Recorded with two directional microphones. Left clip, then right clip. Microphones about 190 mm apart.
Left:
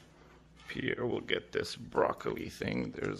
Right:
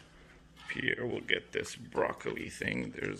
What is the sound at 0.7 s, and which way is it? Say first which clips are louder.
Speech: right 1 dB; 20° left (ahead or behind).